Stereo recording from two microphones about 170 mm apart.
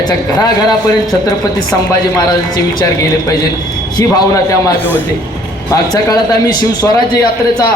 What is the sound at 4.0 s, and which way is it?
Speech, 20° left (ahead or behind).